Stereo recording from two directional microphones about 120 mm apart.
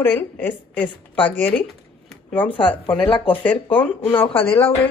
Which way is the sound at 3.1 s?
45° left (ahead or behind).